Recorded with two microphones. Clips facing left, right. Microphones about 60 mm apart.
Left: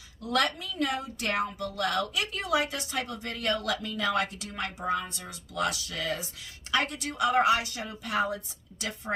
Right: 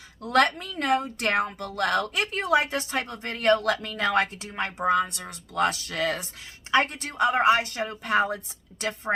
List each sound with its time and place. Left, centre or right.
0.2 s a woman's voice: right
4.8 s speech: right
5.5 s a woman's voice: right
6.7 s a woman's voice: right